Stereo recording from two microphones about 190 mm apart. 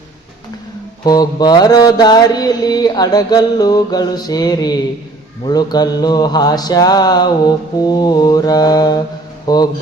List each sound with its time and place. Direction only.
1.0 s mantra: 20° left (ahead or behind)